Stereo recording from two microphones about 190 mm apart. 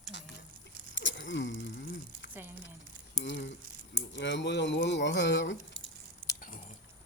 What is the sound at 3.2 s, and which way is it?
Speech, 70° left (ahead or behind).